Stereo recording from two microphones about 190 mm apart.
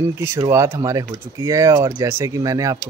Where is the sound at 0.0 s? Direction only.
15° right (ahead or behind).